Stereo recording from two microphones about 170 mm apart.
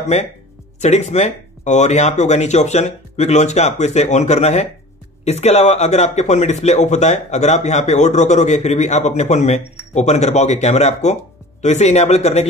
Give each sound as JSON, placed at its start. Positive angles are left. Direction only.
{"t": 0.1, "sound": "speech", "side_deg": 40}